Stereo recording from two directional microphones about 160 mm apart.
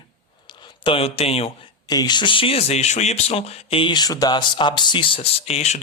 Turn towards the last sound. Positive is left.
turn(degrees=40)  # may be behind; listen again after turning